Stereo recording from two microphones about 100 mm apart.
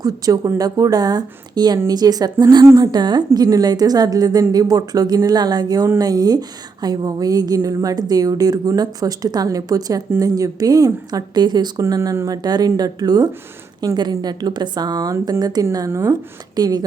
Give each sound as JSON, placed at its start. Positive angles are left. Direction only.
{"t": 0.0, "sound": "a woman's voice", "side_deg": -35}